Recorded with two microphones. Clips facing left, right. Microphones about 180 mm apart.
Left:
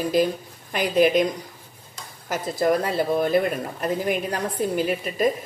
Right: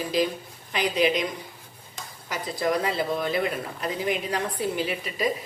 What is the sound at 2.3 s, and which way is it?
Speech, 50° left (ahead or behind).